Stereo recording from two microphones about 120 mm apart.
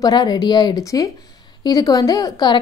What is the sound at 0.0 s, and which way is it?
A woman's voice, 35° left (ahead or behind).